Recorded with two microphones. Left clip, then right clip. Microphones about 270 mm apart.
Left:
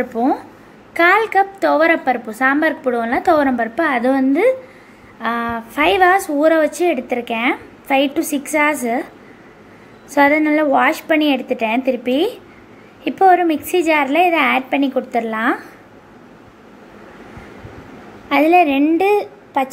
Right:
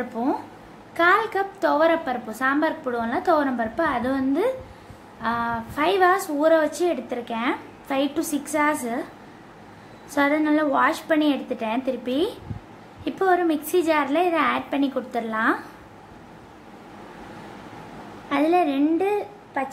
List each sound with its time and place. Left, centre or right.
0.2 s a woman's voice: centre
10.1 s a woman's voice: centre
18.3 s a woman's voice: centre
19.1 s a woman's voice: left